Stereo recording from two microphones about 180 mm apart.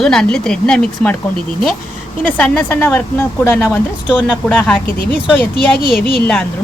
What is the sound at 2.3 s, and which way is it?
Speech, 5° left (ahead or behind).